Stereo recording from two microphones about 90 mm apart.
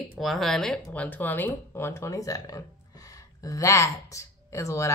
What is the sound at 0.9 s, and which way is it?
Speech, 15° left (ahead or behind).